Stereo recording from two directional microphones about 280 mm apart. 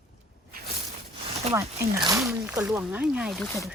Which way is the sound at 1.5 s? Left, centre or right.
Centre.